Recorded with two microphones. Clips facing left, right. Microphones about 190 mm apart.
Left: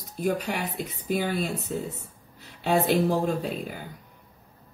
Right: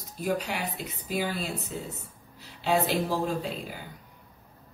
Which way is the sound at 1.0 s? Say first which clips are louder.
Left 4 dB; 50° left (ahead or behind).